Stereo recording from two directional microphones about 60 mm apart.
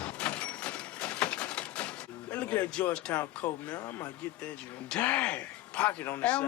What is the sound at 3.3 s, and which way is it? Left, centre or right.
Speech, left.